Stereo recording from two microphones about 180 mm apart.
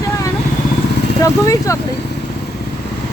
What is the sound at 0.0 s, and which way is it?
Vehicle, 20° left (ahead or behind).